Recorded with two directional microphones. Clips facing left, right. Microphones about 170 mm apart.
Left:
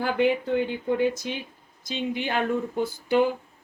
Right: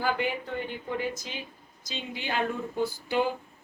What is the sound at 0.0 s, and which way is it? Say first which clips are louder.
Speech: left 6 dB; 70° left (ahead or behind).